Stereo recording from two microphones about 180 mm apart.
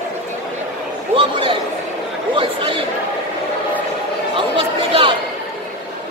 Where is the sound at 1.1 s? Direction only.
30° right (ahead or behind).